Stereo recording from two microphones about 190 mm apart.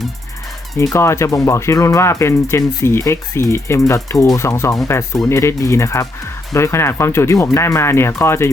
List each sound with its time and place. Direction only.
0.8 s speech: 15° left (ahead or behind)